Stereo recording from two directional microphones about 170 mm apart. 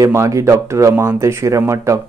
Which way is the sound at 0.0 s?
15° right (ahead or behind).